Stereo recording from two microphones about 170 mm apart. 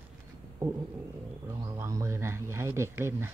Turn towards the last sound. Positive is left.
turn(degrees=-15)  # may be behind; listen again after turning